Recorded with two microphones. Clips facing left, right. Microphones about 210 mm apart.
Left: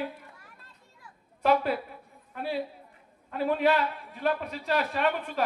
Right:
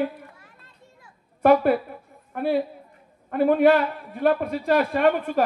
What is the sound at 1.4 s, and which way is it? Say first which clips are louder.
A woman's voice: right 8 dB; 55° right (ahead or behind).